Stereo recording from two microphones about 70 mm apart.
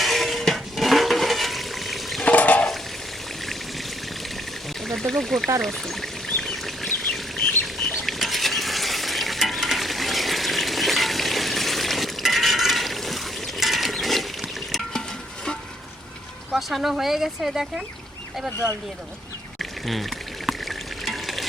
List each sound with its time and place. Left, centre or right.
0.0 s toilet flush: centre
2.2 s water: left
4.9 s speech: centre
5.6 s pour: centre
7.8 s stir: centre
16.5 s speech: centre
19.5 s water: centre